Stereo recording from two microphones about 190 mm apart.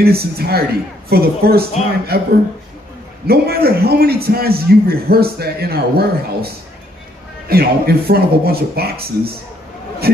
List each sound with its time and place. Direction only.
0.0 s a man's voice: 55° right (ahead or behind)